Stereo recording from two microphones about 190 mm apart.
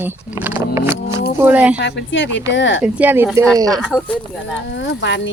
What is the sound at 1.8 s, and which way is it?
Speech, 70° left (ahead or behind).